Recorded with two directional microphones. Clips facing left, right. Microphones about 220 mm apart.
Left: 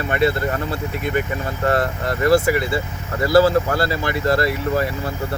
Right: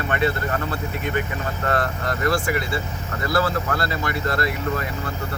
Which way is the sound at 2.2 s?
25° left (ahead or behind).